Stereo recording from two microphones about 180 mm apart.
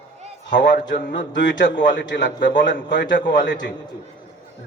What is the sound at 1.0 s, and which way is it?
A man's voice, 75° left (ahead or behind).